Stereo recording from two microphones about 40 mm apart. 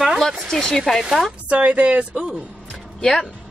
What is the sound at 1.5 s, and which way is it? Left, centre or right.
Speech, right.